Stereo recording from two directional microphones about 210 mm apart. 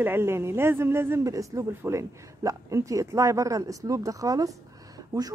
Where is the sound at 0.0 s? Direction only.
10° right (ahead or behind).